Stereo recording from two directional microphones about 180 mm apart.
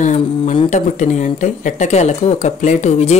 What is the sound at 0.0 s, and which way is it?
Speech, 45° left (ahead or behind).